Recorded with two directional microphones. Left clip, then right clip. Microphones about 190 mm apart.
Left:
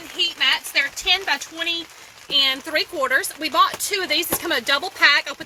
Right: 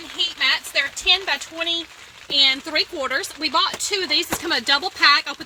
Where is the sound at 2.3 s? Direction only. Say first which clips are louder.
Right 1 dB; 55° right (ahead or behind).